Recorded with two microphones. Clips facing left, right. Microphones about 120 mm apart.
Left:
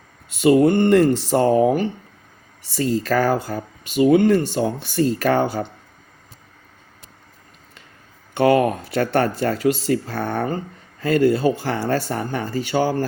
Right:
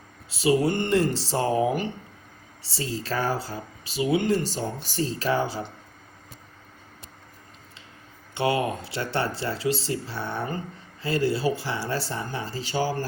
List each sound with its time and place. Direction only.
0.4 s speech: 55° left (ahead or behind)
2.7 s speech: 60° left (ahead or behind)
4.6 s speech: 65° left (ahead or behind)
8.4 s speech: 55° left (ahead or behind)